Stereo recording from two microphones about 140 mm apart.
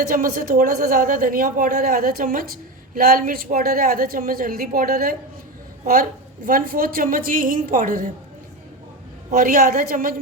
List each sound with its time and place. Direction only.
0.1 s a woman's voice: 75° right (ahead or behind)
9.3 s speech: 80° right